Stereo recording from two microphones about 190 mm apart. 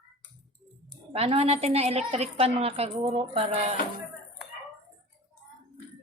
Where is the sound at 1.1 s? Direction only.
30° right (ahead or behind).